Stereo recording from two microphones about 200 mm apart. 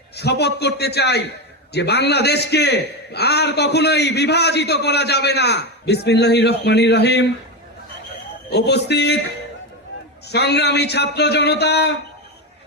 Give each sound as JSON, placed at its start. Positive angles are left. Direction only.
{"t": 0.2, "sound": "a man's voice", "side_deg": 55}
{"t": 8.4, "sound": "a man's voice", "side_deg": 55}
{"t": 10.2, "sound": "a man's voice", "side_deg": 55}